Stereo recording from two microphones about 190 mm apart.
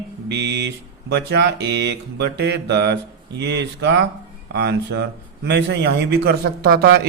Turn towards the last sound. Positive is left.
turn(degrees=-55)  # may be behind; listen again after turning